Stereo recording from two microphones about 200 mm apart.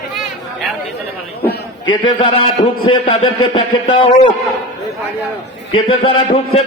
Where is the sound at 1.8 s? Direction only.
25° left (ahead or behind).